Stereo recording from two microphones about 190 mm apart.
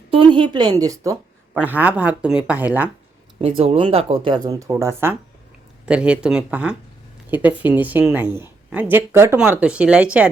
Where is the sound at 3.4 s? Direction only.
30° right (ahead or behind).